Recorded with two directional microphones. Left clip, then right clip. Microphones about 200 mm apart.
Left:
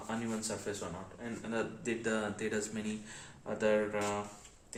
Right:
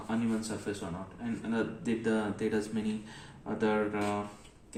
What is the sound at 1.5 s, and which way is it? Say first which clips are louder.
Speech: right 2 dB; 35° left (ahead or behind).